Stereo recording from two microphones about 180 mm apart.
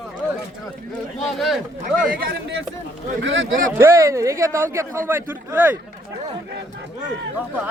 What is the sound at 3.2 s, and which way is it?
Speech, 90° right.